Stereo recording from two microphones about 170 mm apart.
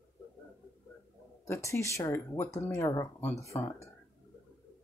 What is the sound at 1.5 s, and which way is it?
Speech, 15° left (ahead or behind).